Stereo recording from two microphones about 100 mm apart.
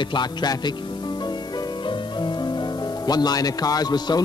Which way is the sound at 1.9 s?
50° left (ahead or behind).